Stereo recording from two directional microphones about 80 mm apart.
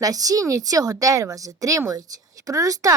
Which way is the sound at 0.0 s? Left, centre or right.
Right.